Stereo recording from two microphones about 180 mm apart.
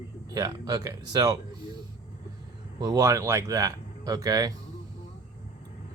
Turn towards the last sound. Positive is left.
turn(degrees=-20)  # may be behind; listen again after turning